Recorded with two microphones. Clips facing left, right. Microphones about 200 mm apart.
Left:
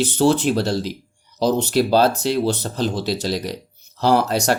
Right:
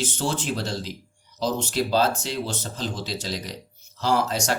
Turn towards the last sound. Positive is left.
turn(degrees=65)  # may be behind; listen again after turning